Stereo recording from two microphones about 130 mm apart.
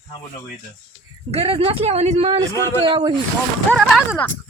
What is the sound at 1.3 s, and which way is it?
Speech, 50° right (ahead or behind).